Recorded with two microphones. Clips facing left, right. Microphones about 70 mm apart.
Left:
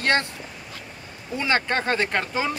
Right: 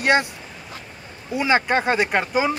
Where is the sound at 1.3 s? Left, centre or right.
Centre.